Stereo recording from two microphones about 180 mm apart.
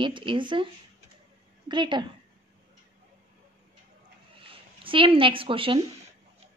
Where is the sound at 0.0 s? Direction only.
25° right (ahead or behind).